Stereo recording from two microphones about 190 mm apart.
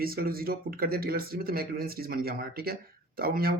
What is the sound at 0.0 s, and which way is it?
Speech, 50° right (ahead or behind).